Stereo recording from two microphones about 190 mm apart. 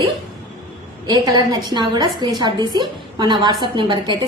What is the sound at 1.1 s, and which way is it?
A woman's voice, 20° right (ahead or behind).